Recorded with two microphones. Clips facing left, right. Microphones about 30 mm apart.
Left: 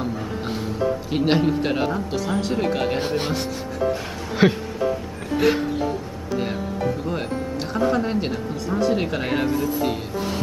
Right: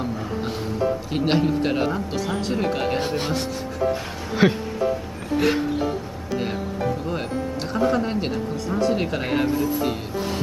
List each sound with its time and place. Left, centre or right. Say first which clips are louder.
1.1 s a woman's voice: left 3 dB; centre
4.4 s a woman's voice: left 1 dB; centre
7.7 s a woman's voice: even; centre